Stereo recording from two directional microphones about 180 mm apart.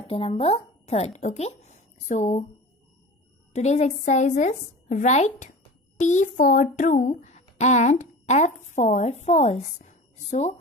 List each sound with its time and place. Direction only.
0.0 s speech: 30° left (ahead or behind)
3.5 s a woman's voice: 40° left (ahead or behind)